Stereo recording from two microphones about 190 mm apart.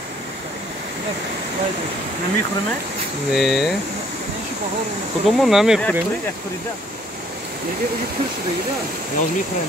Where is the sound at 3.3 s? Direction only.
Centre (ahead or behind).